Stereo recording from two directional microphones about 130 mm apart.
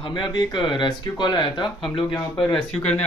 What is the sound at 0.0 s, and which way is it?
Speech, 40° left (ahead or behind).